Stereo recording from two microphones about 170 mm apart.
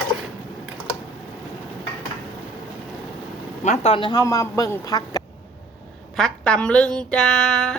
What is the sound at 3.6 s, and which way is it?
Speech, 40° left (ahead or behind).